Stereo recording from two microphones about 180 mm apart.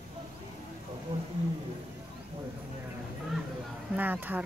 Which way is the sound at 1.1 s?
30° right (ahead or behind).